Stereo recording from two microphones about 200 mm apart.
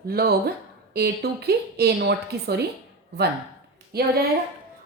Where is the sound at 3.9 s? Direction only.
50° right (ahead or behind).